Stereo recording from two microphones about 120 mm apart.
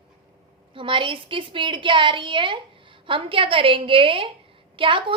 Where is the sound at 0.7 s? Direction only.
45° right (ahead or behind).